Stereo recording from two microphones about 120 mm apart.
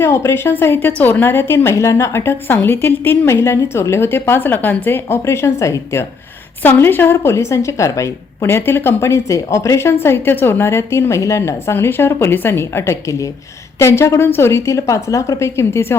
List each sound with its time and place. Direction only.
0.0 s a woman's voice: 20° left (ahead or behind)